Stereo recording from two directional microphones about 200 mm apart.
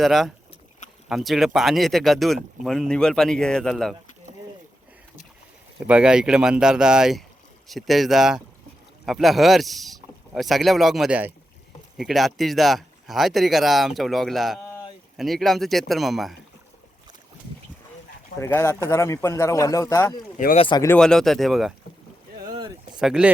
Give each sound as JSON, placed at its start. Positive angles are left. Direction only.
{"t": 0.0, "sound": "speech", "side_deg": 0}
{"t": 5.8, "sound": "speech", "side_deg": -5}
{"t": 18.3, "sound": "speech", "side_deg": 15}
{"t": 20.3, "sound": "speech", "side_deg": 40}
{"t": 20.6, "sound": "speech", "side_deg": 25}
{"t": 20.8, "sound": "speech", "side_deg": 5}
{"t": 23.0, "sound": "speech", "side_deg": -5}